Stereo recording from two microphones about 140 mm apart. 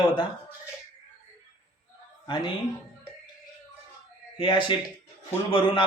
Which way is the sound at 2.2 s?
35° left (ahead or behind).